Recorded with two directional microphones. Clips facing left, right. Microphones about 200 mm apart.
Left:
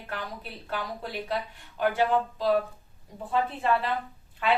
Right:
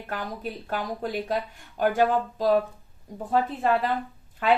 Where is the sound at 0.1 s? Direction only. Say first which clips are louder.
Right 5 dB; 45° right (ahead or behind).